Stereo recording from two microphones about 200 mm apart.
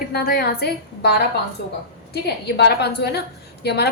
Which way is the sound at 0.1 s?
50° left (ahead or behind).